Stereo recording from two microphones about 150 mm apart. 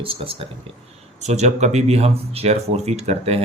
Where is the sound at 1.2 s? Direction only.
50° right (ahead or behind).